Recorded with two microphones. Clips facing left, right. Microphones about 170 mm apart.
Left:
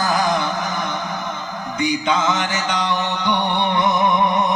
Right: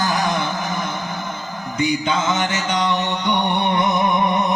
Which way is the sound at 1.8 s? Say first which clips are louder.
Even; 25° right (ahead or behind).